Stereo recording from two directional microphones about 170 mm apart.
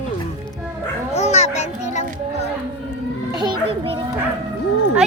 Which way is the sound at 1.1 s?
40° left (ahead or behind).